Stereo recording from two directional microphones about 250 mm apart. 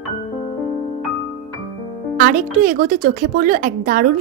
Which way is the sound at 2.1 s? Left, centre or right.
Right.